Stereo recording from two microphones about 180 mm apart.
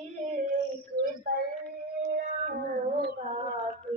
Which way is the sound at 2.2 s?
45° right (ahead or behind).